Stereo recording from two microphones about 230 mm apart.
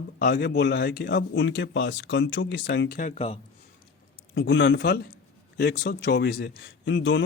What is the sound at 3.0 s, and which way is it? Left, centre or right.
Speech, left.